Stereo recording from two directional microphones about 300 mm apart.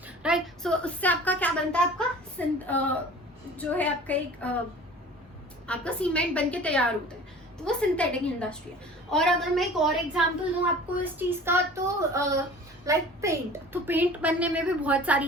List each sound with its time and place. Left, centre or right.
0.2 s a woman's voice: centre
5.6 s a child's voice: centre